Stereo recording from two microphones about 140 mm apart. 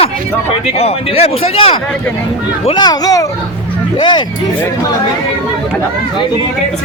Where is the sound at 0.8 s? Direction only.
50° left (ahead or behind).